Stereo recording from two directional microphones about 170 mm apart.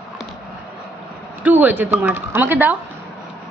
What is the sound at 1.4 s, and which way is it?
A woman's voice, 10° right (ahead or behind).